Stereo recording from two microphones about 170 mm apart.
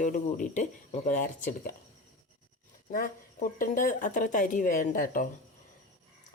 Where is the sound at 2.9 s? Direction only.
55° left (ahead or behind).